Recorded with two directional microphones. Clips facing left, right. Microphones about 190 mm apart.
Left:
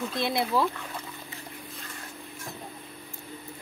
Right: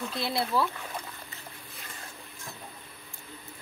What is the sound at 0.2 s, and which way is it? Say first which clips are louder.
Speech: left 2 dB; 20° left (ahead or behind).